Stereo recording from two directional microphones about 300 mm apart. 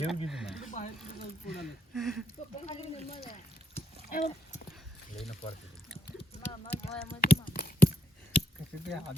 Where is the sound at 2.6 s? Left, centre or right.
Left.